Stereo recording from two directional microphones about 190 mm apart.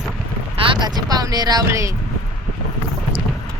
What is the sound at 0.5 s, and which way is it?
Speech, 25° right (ahead or behind).